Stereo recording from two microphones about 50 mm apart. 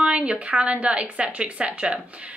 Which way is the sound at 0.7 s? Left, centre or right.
Right.